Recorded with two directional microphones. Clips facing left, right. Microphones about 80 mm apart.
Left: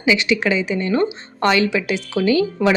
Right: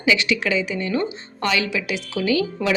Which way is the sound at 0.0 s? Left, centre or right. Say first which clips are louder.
Left 3 dB; left.